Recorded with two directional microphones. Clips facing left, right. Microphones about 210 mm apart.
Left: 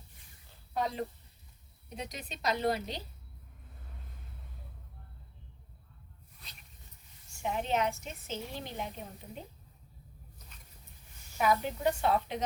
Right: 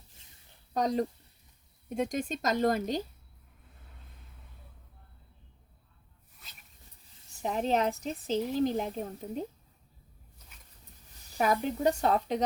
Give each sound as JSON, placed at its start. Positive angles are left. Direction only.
{"t": 0.7, "sound": "a woman's voice", "side_deg": -40}
{"t": 7.3, "sound": "speech", "side_deg": -35}
{"t": 11.3, "sound": "speech", "side_deg": -40}